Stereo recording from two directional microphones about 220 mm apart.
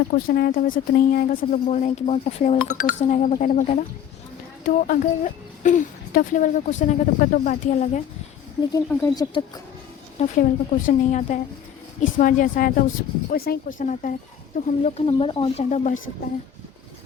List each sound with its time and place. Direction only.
0.1 s speech: 45° left (ahead or behind)
8.7 s speech: 15° left (ahead or behind)
10.2 s speech: 35° left (ahead or behind)